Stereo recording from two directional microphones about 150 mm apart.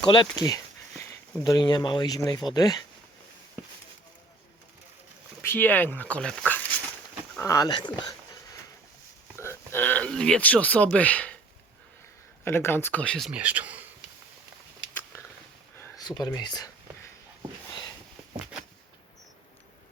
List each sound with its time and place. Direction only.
0.0 s a sound: 30° left (ahead or behind)
1.5 s speech: 25° left (ahead or behind)
5.4 s speech: 15° left (ahead or behind)
7.3 s speech: 20° left (ahead or behind)
9.3 s speech: 15° left (ahead or behind)
12.5 s speech: 15° left (ahead or behind); by 13.8 s 10° right (ahead or behind)
16.0 s speech: 25° left (ahead or behind)